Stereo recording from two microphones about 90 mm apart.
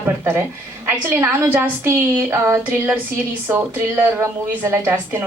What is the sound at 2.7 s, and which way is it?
A woman's voice, 15° right (ahead or behind).